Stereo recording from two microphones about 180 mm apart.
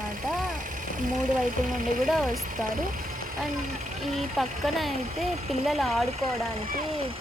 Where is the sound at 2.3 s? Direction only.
50° right (ahead or behind).